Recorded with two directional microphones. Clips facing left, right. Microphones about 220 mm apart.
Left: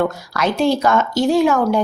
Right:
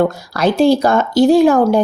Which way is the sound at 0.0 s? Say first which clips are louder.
Right 4 dB; 35° right (ahead or behind).